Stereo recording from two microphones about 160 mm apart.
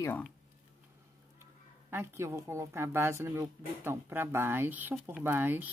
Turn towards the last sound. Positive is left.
turn(degrees=-15)  # may be behind; listen again after turning